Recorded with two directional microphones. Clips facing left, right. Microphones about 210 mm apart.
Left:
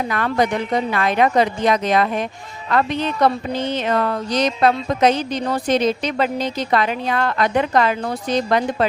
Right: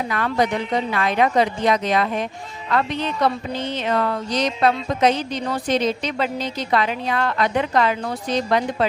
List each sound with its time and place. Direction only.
0.1 s a woman's voice: 50° left (ahead or behind)